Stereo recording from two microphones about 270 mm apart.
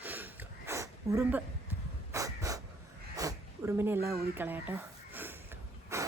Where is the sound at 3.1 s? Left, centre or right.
Centre.